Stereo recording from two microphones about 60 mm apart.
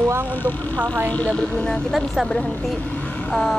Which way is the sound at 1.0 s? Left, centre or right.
Centre.